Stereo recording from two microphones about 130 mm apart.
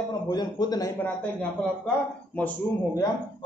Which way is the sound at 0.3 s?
30° left (ahead or behind).